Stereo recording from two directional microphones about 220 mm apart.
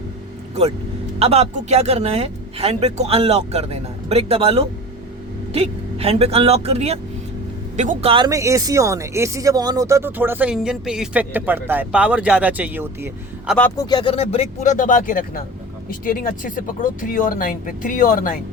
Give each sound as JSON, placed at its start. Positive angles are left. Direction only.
{"t": 1.2, "sound": "speech", "side_deg": -30}
{"t": 13.5, "sound": "speech", "side_deg": 10}